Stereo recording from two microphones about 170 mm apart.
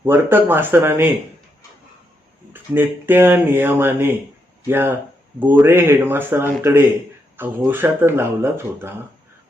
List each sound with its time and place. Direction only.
0.0 s speech: 10° right (ahead or behind)
2.5 s speech: 10° right (ahead or behind)